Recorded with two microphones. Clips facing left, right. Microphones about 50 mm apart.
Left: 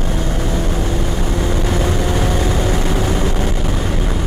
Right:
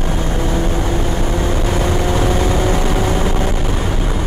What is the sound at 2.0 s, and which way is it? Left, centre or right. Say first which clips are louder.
Vehicle: right 2 dB; centre.